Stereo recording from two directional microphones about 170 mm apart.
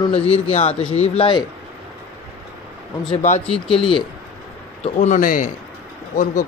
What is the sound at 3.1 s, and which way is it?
Speech, 40° left (ahead or behind).